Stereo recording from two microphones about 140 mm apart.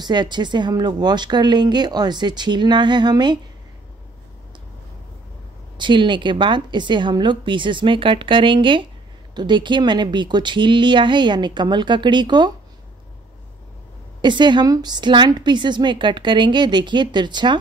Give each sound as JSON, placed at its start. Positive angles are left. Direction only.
{"t": 0.0, "sound": "a woman's voice", "side_deg": -30}
{"t": 5.8, "sound": "a woman's voice", "side_deg": -35}
{"t": 14.2, "sound": "a woman's voice", "side_deg": -35}